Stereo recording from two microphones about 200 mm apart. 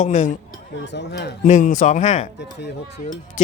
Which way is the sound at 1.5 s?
40° left (ahead or behind).